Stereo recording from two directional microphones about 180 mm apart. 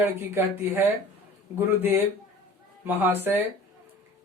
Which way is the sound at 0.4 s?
15° right (ahead or behind).